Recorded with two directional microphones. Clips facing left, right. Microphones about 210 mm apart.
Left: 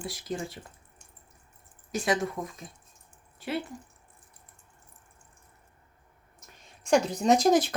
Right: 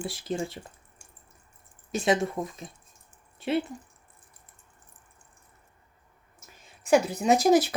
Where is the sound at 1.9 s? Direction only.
25° right (ahead or behind).